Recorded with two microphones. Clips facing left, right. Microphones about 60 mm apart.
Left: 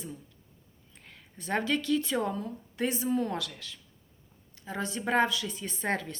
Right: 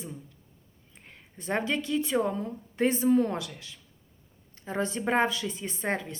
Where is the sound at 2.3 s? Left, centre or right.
Right.